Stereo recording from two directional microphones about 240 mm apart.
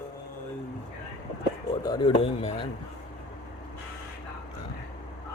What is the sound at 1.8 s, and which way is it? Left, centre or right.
Speech, centre.